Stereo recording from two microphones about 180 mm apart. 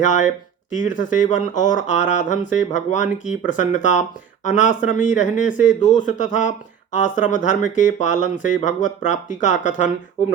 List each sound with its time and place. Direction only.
0.7 s speech: 45° left (ahead or behind)